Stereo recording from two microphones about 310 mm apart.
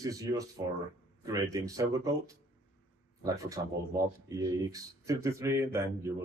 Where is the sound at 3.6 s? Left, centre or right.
Centre.